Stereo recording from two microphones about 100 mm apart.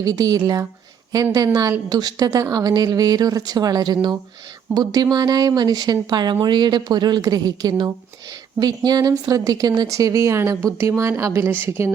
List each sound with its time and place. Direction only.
0.0 s a woman's voice: 40° right (ahead or behind); by 11.9 s 20° right (ahead or behind)